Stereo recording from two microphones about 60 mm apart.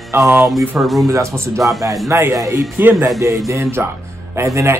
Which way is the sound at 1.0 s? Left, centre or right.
Right.